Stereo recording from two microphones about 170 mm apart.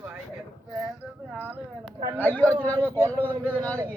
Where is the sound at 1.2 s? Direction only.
10° right (ahead or behind).